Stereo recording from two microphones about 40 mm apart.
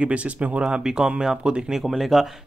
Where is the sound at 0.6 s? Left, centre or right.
Right.